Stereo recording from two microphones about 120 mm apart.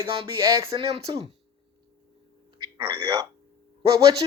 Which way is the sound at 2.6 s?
30° right (ahead or behind).